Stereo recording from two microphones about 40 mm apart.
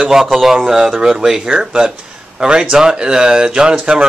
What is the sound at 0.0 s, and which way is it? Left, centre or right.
Speech, centre.